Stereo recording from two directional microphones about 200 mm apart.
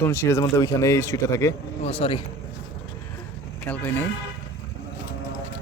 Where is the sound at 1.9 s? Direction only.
30° left (ahead or behind).